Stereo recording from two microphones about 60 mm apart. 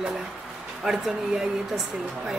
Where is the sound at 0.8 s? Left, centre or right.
Centre.